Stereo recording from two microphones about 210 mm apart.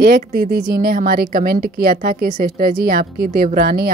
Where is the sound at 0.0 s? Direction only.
45° right (ahead or behind).